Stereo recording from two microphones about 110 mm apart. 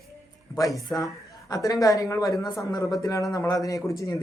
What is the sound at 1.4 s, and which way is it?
A man's voice, 35° left (ahead or behind).